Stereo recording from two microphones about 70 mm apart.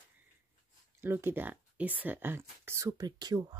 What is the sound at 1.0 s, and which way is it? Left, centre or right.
Speech, right.